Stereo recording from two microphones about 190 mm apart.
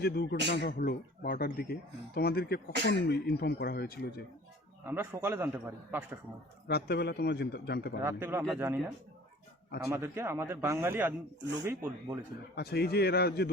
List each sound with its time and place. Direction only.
0.0 s speech: 55° left (ahead or behind)
4.9 s a man's voice: 10° right (ahead or behind)
6.7 s speech: 60° left (ahead or behind)
8.0 s a man's voice: 15° right (ahead or behind)
9.8 s a man's voice: 15° right (ahead or behind)
12.5 s speech: 60° left (ahead or behind)